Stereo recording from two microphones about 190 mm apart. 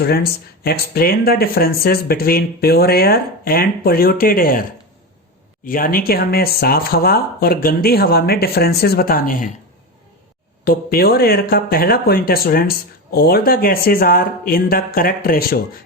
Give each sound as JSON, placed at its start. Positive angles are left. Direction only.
{"t": 0.0, "sound": "speech", "side_deg": 55}
{"t": 5.6, "sound": "speech", "side_deg": 45}
{"t": 10.6, "sound": "speech", "side_deg": 50}